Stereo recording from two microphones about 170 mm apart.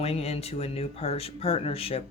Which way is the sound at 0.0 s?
35° left (ahead or behind).